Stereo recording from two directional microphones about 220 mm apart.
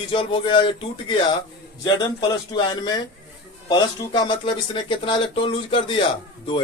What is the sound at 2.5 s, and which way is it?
Speech, 20° left (ahead or behind).